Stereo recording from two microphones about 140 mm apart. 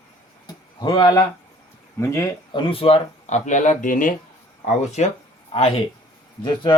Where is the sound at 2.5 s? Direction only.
40° left (ahead or behind); by 4.1 s 70° left (ahead or behind).